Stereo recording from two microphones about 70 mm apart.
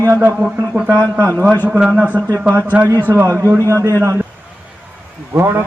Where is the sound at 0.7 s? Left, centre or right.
Right.